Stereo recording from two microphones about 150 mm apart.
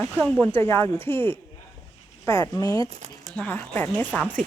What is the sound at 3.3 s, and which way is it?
Speech, 10° left (ahead or behind).